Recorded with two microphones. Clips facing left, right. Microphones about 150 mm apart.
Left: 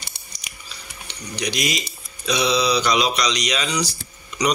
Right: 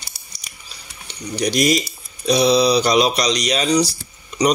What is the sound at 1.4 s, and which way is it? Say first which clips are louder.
Speech: right 8 dB; 45° right (ahead or behind).